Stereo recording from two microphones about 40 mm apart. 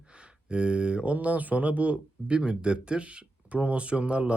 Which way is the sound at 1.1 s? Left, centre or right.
Right.